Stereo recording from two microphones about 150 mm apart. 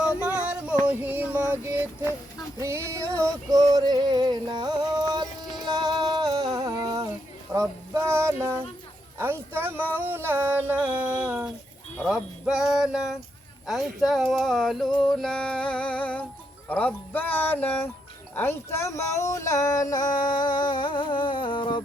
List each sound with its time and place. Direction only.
0.9 s female singing: 10° right (ahead or behind)
2.6 s music: 20° right (ahead or behind)
7.9 s a sound: 15° right (ahead or behind)
11.9 s speech: 5° right (ahead or behind)
15.0 s music: 5° left (ahead or behind)
18.3 s a sound: 15° left (ahead or behind); by 21.8 s 35° left (ahead or behind)